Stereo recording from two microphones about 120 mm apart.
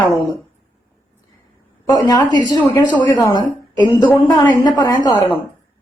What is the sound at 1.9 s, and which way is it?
Speech, 35° left (ahead or behind).